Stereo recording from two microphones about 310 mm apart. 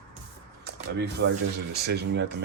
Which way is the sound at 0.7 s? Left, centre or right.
Right.